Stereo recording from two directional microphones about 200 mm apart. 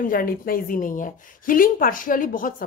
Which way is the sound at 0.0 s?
45° left (ahead or behind).